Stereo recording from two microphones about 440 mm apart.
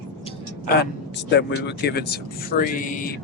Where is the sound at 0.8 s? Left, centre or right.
Left.